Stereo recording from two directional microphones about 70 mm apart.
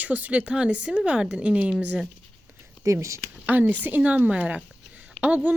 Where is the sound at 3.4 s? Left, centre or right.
Right.